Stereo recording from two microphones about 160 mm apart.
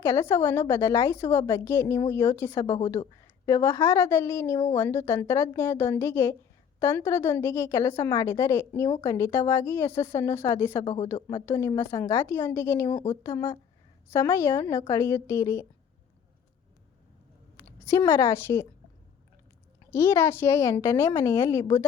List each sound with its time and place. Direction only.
0.0 s a woman's voice: 15° left (ahead or behind)
3.0 s speech: 30° left (ahead or behind)
3.4 s a woman's voice: 20° left (ahead or behind)
10.8 s speech: 35° left (ahead or behind)
11.1 s a woman's voice: 20° left (ahead or behind)
17.6 s a woman's voice: 15° left (ahead or behind)
19.9 s a woman's voice: 15° left (ahead or behind)